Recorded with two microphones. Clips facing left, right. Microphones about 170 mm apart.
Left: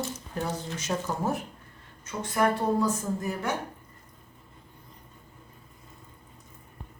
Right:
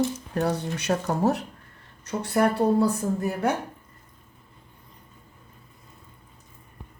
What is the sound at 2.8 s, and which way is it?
Speech, 60° right (ahead or behind).